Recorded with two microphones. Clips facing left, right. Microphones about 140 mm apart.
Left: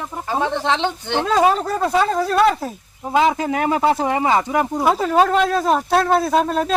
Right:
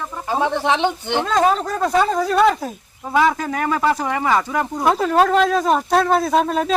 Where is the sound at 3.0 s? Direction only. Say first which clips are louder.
Left 1 dB; 20° left (ahead or behind).